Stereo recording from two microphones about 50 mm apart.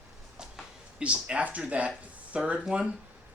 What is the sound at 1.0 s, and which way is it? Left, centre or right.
Speech, right.